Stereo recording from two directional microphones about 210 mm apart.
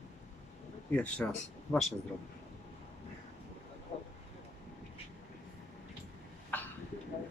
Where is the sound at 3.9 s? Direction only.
25° left (ahead or behind).